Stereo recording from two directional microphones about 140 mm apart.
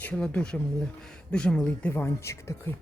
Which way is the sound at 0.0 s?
10° left (ahead or behind).